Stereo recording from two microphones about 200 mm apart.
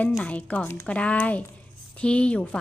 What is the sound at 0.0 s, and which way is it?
A woman's voice, 5° left (ahead or behind).